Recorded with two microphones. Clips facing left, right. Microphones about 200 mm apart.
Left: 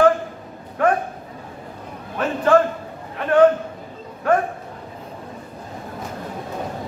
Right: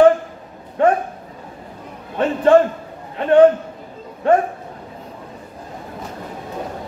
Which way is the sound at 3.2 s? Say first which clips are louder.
Right 4 dB; 25° right (ahead or behind).